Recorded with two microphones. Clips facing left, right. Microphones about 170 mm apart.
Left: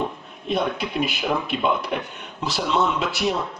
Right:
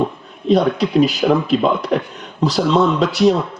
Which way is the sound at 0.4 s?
35° right (ahead or behind).